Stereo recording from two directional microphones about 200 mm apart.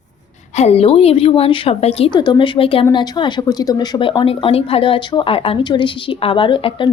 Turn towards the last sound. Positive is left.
turn(degrees=25)  # may be behind; listen again after turning